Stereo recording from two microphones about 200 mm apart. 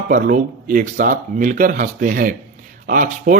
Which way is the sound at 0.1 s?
40° right (ahead or behind).